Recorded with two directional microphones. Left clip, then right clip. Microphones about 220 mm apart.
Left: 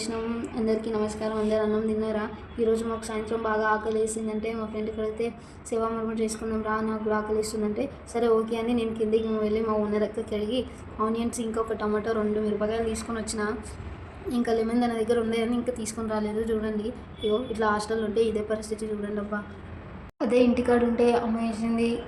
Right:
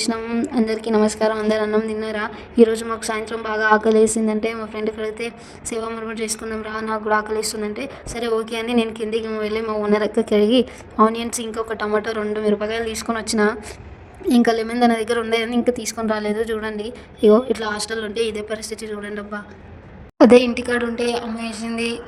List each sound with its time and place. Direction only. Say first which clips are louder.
0.0 s a woman's voice: right 8 dB; 40° right (ahead or behind)